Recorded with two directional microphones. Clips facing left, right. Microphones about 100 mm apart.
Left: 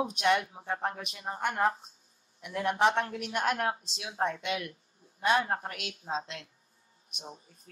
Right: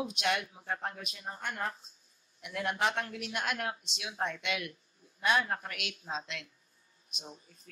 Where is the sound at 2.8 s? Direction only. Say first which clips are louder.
Left 8 dB; 50° left (ahead or behind); by 6.5 s 35° left (ahead or behind).